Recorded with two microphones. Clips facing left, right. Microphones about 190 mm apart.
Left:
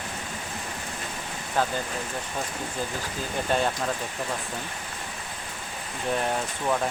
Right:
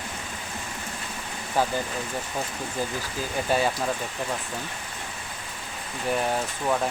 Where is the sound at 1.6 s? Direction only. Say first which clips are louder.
Right 1 dB; 10° right (ahead or behind).